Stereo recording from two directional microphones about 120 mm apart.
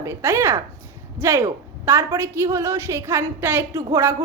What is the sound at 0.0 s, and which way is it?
A woman's voice, 20° right (ahead or behind).